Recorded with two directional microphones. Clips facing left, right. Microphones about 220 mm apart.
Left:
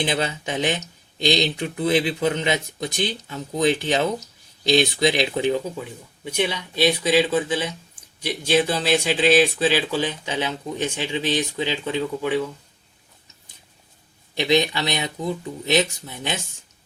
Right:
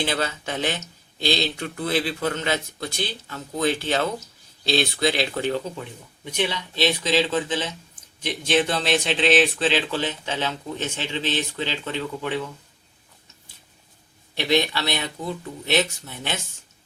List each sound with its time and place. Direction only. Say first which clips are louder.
0.0 s speech: left 2 dB; 15° left (ahead or behind)
14.3 s speech: left 2 dB; 15° left (ahead or behind)